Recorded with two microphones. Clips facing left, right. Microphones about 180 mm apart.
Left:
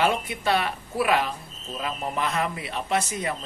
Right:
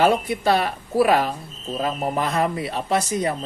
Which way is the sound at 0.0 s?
35° right (ahead or behind).